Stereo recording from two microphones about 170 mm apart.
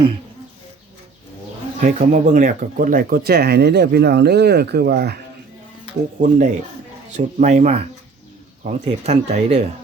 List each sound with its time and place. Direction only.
1.8 s speech: 45° right (ahead or behind); by 5.2 s 70° right (ahead or behind)
6.2 s speech: 45° right (ahead or behind)